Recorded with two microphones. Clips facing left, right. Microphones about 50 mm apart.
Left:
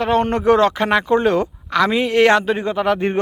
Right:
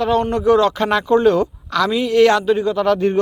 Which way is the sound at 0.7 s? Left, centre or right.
Left.